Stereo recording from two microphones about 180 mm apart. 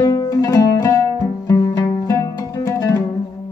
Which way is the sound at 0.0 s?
20° left (ahead or behind).